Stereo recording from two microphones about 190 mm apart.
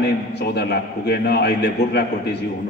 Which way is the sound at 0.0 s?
60° left (ahead or behind).